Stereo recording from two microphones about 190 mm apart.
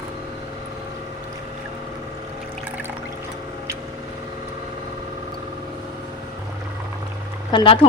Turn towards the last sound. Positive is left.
turn(degrees=30)  # may be behind; listen again after turning